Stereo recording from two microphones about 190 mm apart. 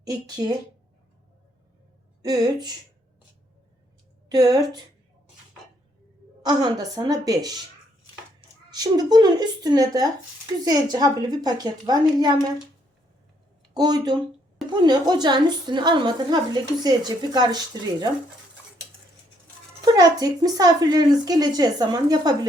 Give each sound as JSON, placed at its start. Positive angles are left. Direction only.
{"t": 0.0, "sound": "speech", "side_deg": -20}
{"t": 2.2, "sound": "speech", "side_deg": -20}
{"t": 4.3, "sound": "speech", "side_deg": -20}
{"t": 6.4, "sound": "speech", "side_deg": -20}
{"t": 13.7, "sound": "speech", "side_deg": -20}
{"t": 19.8, "sound": "speech", "side_deg": -20}